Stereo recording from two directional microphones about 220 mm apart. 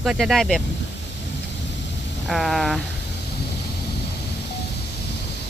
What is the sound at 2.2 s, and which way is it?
Speech, centre (ahead or behind).